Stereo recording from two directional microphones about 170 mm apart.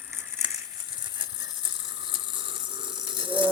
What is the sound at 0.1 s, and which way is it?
Crumpling, 15° right (ahead or behind).